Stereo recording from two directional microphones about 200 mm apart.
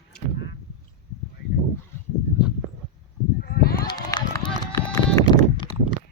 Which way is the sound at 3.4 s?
50° left (ahead or behind).